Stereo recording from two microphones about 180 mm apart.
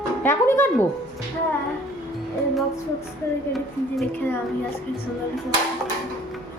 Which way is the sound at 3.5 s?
Centre (ahead or behind).